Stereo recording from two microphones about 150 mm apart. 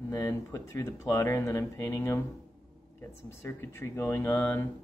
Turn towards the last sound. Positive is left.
turn(degrees=15)  # may be behind; listen again after turning